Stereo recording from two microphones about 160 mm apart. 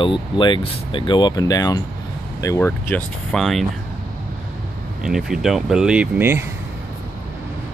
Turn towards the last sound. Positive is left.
turn(degrees=-15)  # may be behind; listen again after turning